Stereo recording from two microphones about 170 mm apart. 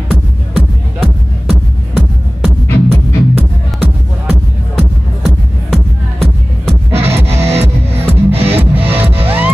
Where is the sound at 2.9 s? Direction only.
35° right (ahead or behind).